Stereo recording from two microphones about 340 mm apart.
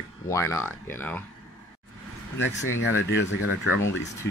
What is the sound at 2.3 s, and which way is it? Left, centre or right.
Speech, left.